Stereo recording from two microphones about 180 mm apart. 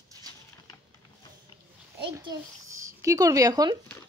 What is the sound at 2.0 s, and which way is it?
A child's voice, 25° right (ahead or behind).